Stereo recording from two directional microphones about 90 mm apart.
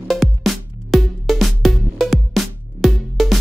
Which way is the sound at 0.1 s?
Centre (ahead or behind).